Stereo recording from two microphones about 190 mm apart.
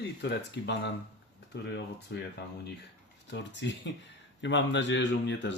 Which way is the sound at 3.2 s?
70° left (ahead or behind).